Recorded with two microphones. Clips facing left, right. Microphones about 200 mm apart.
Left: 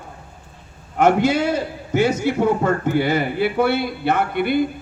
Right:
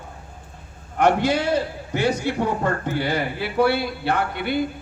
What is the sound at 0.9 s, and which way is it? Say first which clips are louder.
A man's voice: left 3 dB; 5° left (ahead or behind).